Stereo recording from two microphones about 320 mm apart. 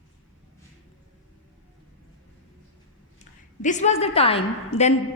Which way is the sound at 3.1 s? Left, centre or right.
Left.